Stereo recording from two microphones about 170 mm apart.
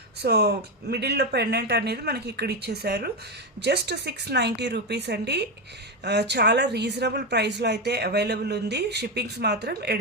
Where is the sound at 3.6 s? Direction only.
80° right.